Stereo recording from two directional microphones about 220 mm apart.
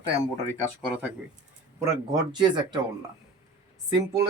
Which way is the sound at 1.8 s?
20° right (ahead or behind).